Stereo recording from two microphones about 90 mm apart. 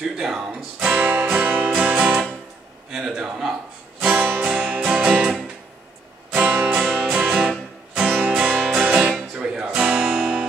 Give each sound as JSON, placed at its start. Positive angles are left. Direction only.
{"t": 0.2, "sound": "music", "side_deg": -5}
{"t": 0.5, "sound": "music", "side_deg": -15}
{"t": 2.9, "sound": "a sound", "side_deg": -5}
{"t": 4.0, "sound": "music", "side_deg": -20}
{"t": 6.3, "sound": "music", "side_deg": -15}
{"t": 8.8, "sound": "guitar", "side_deg": -15}